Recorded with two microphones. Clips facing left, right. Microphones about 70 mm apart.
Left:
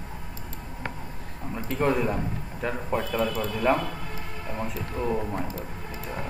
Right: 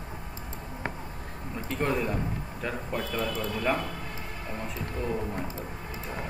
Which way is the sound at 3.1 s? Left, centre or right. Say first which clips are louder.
Left 3 dB; left.